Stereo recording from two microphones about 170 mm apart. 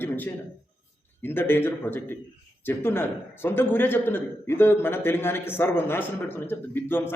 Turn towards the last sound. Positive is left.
turn(degrees=10)  # may be behind; listen again after turning